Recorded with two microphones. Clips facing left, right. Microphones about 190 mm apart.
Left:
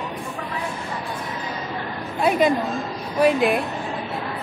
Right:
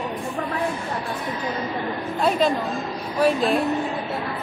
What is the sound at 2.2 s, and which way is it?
A woman's voice, 15° left (ahead or behind).